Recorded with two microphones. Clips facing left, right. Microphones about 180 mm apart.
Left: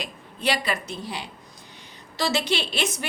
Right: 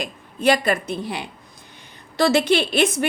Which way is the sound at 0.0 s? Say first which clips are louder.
Right 8 dB; 45° right (ahead or behind).